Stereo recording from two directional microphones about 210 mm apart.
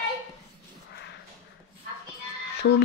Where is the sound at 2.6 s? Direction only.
60° left (ahead or behind).